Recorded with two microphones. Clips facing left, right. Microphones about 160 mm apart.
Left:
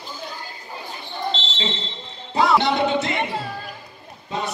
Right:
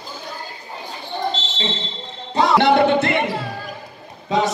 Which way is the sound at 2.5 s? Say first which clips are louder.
Right 5 dB; 60° right (ahead or behind).